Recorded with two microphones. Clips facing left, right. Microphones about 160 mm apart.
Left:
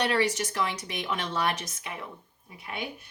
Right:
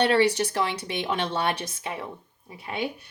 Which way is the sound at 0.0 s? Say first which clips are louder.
Right 5 dB; 30° right (ahead or behind).